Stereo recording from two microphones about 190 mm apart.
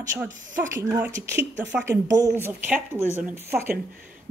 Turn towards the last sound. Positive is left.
turn(degrees=-10)  # may be behind; listen again after turning